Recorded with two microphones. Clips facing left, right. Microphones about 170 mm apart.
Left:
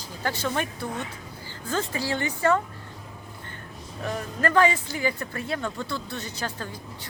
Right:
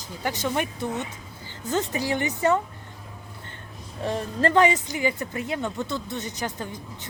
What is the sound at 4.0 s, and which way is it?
Speech, 25° right (ahead or behind).